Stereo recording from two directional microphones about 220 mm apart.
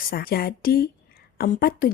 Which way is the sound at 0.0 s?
45° left (ahead or behind).